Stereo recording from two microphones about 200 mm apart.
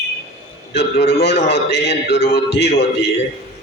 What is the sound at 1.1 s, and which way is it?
Speech, 30° left (ahead or behind).